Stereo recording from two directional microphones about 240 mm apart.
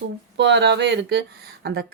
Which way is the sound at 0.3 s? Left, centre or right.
Right.